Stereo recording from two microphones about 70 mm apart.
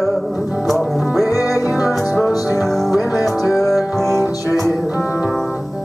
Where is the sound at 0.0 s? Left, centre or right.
Centre.